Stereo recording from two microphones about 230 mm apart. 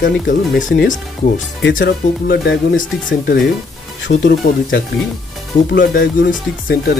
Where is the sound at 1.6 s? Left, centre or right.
Left.